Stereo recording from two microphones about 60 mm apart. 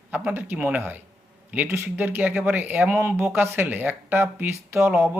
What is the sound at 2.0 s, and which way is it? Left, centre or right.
Speech, right.